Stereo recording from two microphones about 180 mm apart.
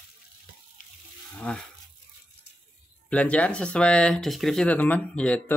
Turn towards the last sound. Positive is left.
turn(degrees=5)  # may be behind; listen again after turning